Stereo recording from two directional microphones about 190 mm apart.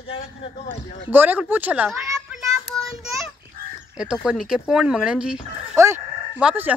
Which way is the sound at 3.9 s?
5° right (ahead or behind).